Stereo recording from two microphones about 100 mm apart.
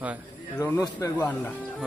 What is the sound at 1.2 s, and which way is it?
Speech, 15° left (ahead or behind).